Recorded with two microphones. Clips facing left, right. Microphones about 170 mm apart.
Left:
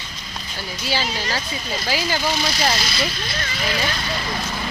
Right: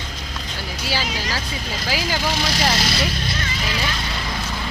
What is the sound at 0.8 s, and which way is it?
Speech, 10° right (ahead or behind).